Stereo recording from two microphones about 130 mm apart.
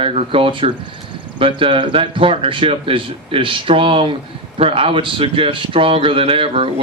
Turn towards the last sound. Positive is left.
turn(degrees=-45)  # may be behind; listen again after turning